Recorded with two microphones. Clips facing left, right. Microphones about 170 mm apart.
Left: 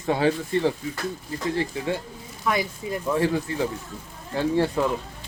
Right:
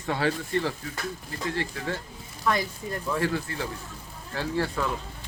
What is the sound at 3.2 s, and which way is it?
Speech, 20° left (ahead or behind).